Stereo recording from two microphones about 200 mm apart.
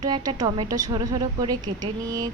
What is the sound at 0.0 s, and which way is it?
Speech, 20° right (ahead or behind).